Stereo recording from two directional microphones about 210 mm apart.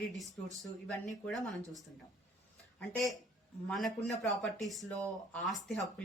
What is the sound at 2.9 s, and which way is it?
Speech, centre (ahead or behind).